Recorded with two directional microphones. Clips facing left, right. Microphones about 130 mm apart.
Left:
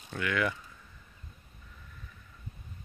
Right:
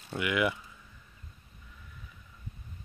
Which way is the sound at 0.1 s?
15° right (ahead or behind).